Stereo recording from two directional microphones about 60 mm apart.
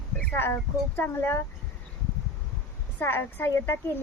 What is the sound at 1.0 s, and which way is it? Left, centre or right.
Speech, left.